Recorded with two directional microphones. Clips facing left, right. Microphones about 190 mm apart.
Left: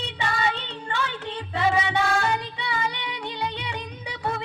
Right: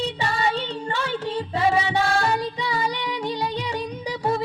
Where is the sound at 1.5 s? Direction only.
35° right (ahead or behind).